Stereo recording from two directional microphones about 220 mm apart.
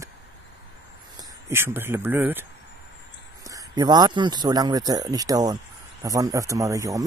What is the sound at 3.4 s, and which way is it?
Speech, 15° right (ahead or behind).